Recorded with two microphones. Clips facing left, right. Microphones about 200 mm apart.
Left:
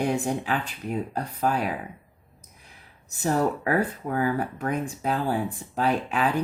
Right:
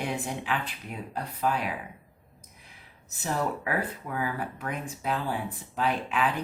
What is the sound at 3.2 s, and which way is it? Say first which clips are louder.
Speech: left 6 dB; 45° left (ahead or behind).